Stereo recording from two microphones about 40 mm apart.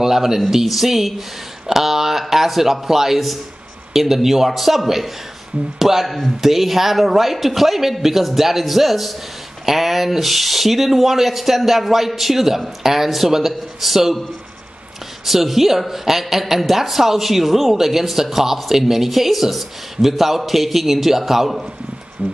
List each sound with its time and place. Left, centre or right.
0.0 s a woman's voice: centre
15.2 s a woman's voice: centre
22.2 s music: right